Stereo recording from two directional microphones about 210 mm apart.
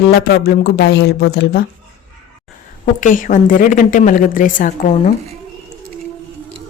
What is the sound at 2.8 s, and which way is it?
A woman's voice, 40° left (ahead or behind).